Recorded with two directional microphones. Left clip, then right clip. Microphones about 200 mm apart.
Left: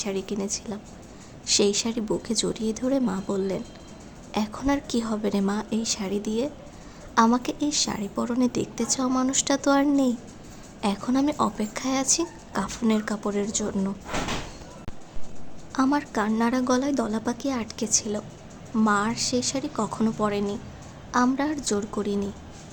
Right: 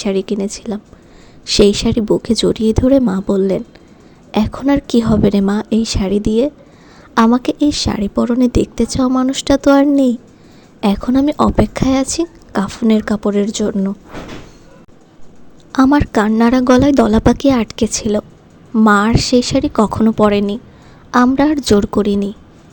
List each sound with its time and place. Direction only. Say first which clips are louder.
0.0 s a woman's voice: right 12 dB; 40° right (ahead or behind)
15.7 s a woman's voice: right 12 dB; 40° right (ahead or behind)